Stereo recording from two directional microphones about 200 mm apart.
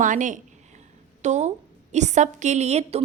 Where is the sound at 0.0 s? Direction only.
40° right (ahead or behind).